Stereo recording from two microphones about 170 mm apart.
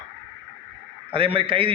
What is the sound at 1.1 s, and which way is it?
Speech, 30° right (ahead or behind).